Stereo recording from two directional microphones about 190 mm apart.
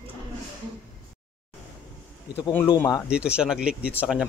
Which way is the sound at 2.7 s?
15° left (ahead or behind).